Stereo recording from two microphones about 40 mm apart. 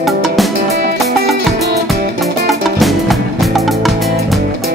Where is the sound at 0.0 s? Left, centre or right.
Centre.